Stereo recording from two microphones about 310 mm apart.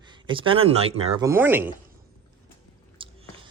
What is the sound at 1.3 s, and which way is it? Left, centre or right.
Speech, centre.